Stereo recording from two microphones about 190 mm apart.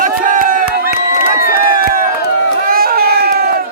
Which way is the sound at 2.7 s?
55° right (ahead or behind).